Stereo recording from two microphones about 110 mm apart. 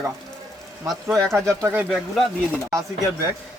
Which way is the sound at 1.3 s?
25° right (ahead or behind).